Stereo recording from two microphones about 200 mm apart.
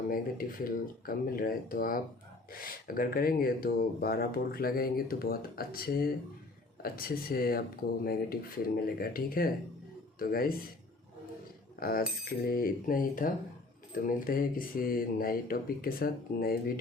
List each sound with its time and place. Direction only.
0.1 s speech: 45° left (ahead or behind)
11.8 s speech: 45° left (ahead or behind)